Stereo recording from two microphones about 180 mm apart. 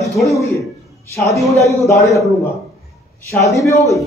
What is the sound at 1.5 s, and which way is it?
Speech, 15° right (ahead or behind).